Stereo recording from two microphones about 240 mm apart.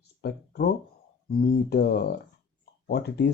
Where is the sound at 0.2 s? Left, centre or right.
Left.